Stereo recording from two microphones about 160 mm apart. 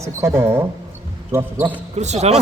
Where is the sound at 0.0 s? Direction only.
20° right (ahead or behind).